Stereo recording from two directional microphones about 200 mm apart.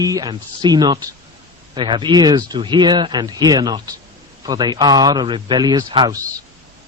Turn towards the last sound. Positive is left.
turn(degrees=-20)  # may be behind; listen again after turning